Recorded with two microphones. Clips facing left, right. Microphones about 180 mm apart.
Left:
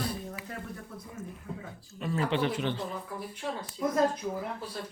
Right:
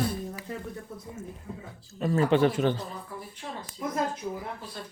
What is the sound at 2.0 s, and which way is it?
Speech, 45° right (ahead or behind).